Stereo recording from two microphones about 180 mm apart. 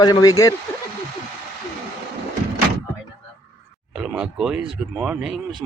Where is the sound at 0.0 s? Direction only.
20° left (ahead or behind).